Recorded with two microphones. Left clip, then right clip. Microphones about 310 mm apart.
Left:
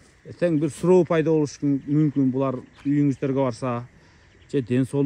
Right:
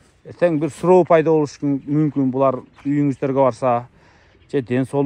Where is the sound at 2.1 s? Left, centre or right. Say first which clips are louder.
Right 3 dB; right.